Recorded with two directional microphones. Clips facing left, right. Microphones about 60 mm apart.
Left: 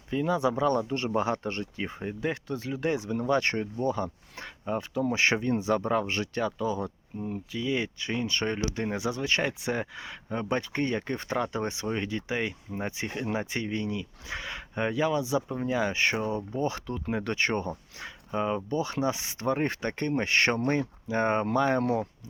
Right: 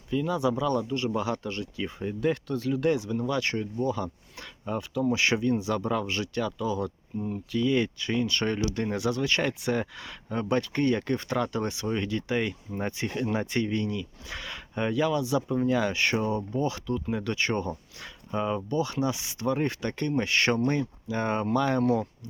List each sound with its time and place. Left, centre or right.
0.1 s speech: left
2.0 s speech: left
5.0 s speech: left
7.3 s speech: centre